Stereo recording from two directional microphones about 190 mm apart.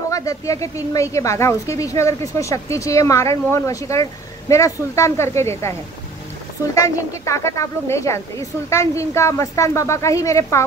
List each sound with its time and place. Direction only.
0.1 s a woman's voice: 15° left (ahead or behind)